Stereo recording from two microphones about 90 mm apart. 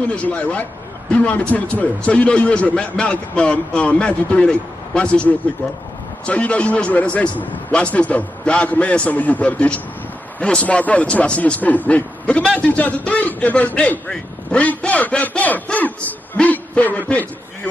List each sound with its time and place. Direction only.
0.1 s a man's voice: 15° left (ahead or behind)